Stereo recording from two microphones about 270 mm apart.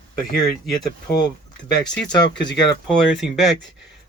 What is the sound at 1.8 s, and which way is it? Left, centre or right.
Speech, centre.